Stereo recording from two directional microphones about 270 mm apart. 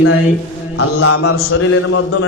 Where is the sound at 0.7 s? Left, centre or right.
Left.